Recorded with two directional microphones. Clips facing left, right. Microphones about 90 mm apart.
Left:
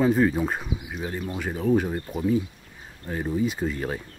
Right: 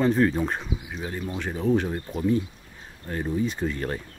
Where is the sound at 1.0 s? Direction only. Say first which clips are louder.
Left 1 dB; 5° left (ahead or behind).